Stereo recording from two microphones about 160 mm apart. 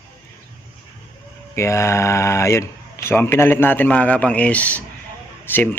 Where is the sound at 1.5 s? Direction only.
15° left (ahead or behind).